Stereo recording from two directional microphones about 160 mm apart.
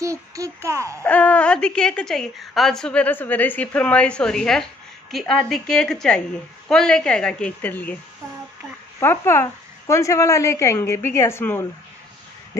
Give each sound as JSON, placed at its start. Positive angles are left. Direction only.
{"t": 0.0, "sound": "a child's voice", "side_deg": -20}
{"t": 1.0, "sound": "a woman's voice", "side_deg": 10}
{"t": 9.0, "sound": "a woman's voice", "side_deg": 15}